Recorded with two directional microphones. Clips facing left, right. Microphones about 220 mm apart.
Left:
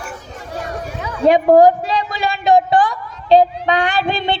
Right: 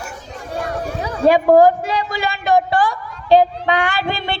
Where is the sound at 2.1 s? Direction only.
20° left (ahead or behind).